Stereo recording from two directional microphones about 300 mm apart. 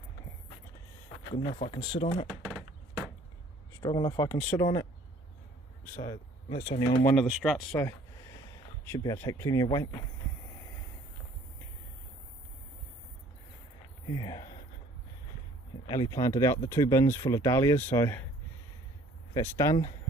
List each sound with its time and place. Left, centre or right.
1.3 s speech: centre
2.4 s a sound: centre
3.8 s speech: centre
14.1 s speech: centre
15.9 s speech: centre
19.3 s speech: centre